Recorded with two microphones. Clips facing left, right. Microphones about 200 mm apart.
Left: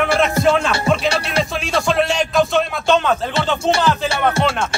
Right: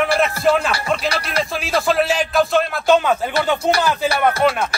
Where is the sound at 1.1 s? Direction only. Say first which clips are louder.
Left 2 dB; 30° left (ahead or behind).